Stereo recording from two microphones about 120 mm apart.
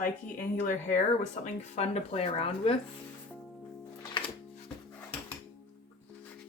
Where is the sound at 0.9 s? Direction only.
90° left; by 2.7 s 55° left (ahead or behind).